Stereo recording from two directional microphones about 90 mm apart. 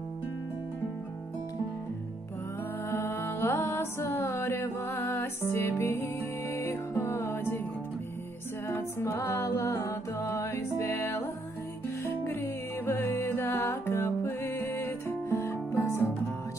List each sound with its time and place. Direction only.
2.9 s music: 25° left (ahead or behind)
8.6 s music: 30° left (ahead or behind)